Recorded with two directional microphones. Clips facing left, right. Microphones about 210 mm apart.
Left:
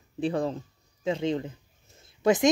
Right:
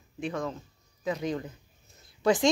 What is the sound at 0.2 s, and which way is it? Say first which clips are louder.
A woman's voice: left 5 dB; 35° left (ahead or behind).